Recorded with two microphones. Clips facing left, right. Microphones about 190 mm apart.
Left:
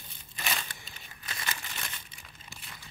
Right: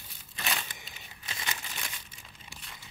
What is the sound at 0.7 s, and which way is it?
Crumpling, 20° right (ahead or behind).